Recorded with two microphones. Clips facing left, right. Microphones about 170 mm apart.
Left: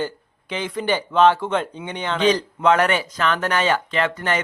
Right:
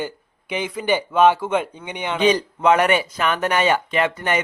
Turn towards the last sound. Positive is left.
turn(degrees=-10)  # may be behind; listen again after turning